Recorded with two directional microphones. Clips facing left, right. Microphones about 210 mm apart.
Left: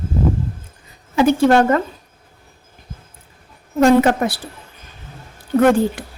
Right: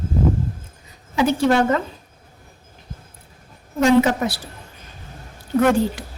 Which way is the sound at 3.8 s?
55° left (ahead or behind).